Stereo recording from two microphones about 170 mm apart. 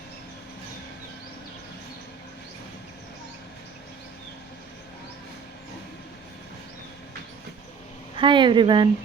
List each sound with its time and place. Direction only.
8.1 s speech: 30° right (ahead or behind)